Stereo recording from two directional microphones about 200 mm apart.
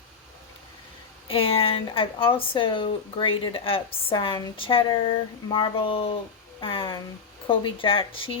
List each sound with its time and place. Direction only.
1.3 s speech: 30° left (ahead or behind)